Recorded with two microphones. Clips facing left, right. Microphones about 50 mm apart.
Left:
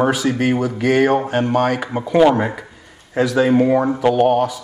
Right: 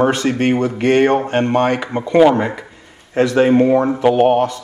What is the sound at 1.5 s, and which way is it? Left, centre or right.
Speech, right.